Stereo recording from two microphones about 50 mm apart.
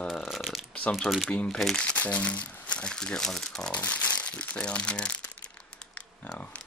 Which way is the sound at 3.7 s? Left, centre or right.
Left.